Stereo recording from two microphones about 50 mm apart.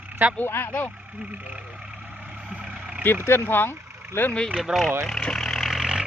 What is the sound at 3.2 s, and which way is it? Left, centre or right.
Speech, left.